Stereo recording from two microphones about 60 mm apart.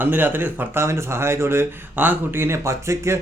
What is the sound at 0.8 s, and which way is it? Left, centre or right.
Speech, right.